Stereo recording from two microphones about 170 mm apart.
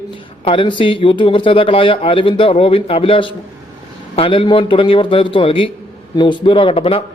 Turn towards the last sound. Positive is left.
turn(degrees=35)  # may be behind; listen again after turning